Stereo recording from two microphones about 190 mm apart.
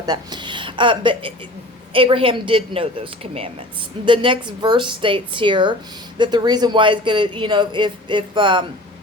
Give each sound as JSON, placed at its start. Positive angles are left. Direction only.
{"t": 0.0, "sound": "speech", "side_deg": -20}